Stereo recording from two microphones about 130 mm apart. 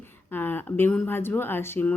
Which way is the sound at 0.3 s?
15° left (ahead or behind).